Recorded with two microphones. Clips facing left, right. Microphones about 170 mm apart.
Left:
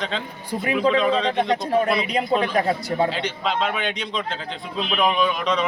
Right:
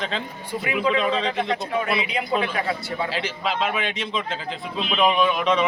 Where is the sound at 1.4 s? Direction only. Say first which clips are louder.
Left 4 dB; 35° left (ahead or behind).